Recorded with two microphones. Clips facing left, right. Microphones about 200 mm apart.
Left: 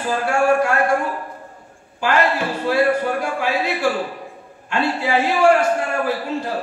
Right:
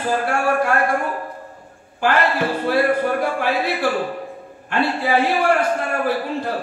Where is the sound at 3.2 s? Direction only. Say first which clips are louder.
Right 1 dB; 55° right (ahead or behind).